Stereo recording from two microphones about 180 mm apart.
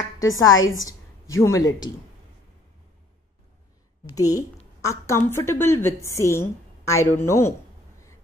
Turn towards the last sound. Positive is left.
turn(degrees=15)  # may be behind; listen again after turning